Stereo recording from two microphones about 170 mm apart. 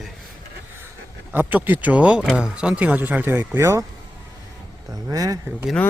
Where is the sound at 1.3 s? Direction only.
10° right (ahead or behind).